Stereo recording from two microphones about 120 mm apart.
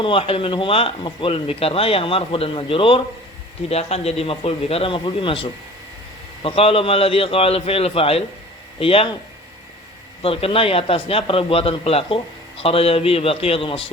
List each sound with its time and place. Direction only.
0.0 s a man's voice: 50° left (ahead or behind)
3.7 s a man's voice: 60° left (ahead or behind)
10.2 s a man's voice: 50° left (ahead or behind)